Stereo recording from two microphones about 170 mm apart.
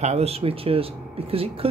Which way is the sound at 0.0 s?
40° right (ahead or behind).